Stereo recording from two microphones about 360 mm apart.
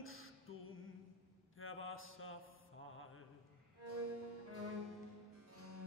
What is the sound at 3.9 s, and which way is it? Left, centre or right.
Music, right.